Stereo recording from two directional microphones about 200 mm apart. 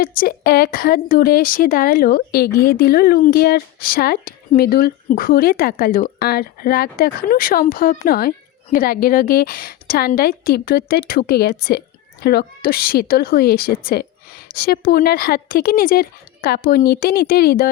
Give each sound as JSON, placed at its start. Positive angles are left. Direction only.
{"t": 0.0, "sound": "a woman's voice", "side_deg": 45}